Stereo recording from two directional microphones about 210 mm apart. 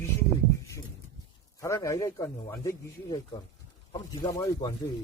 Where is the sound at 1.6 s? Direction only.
15° left (ahead or behind).